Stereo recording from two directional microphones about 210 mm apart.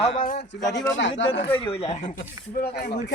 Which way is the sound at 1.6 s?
25° left (ahead or behind).